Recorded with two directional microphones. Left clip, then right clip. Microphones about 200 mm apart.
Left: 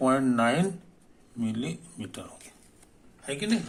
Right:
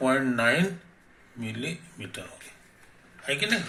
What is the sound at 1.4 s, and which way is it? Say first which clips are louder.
Speech: left 1 dB; 35° left (ahead or behind).